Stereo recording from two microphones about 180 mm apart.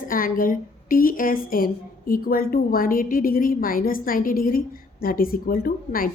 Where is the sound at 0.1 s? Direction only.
50° left (ahead or behind).